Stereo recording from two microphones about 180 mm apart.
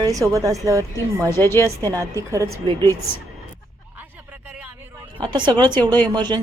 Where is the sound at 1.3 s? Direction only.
15° left (ahead or behind).